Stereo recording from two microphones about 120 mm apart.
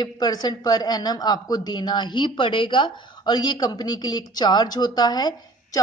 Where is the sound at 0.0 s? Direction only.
35° left (ahead or behind).